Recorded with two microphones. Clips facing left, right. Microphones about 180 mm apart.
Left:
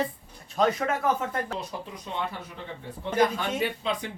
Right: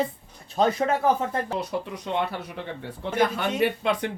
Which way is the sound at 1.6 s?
70° right (ahead or behind).